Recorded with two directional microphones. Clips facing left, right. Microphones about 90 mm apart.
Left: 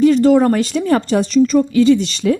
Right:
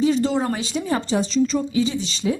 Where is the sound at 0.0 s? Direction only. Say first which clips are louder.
Left 9 dB; 55° left (ahead or behind).